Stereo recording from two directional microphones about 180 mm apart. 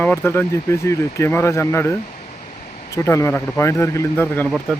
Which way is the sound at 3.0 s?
15° left (ahead or behind).